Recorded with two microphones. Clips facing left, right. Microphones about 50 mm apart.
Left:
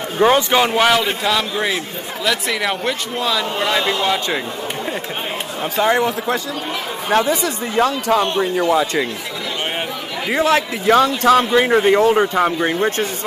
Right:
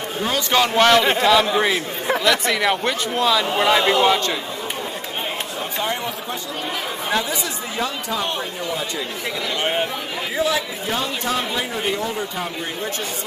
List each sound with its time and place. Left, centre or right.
0.5 s a man's voice: centre
1.2 s a man's voice: centre
5.8 s speech: left
7.1 s speech: left
10.3 s speech: left
10.9 s speech: left